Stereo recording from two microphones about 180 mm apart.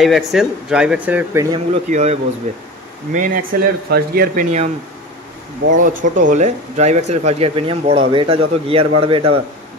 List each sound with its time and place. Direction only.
0.0 s a man's voice: centre (ahead or behind); by 1.6 s 15° right (ahead or behind)
1.9 s speech: 40° right (ahead or behind)
5.8 s speech: 45° right (ahead or behind); by 9.4 s 30° right (ahead or behind)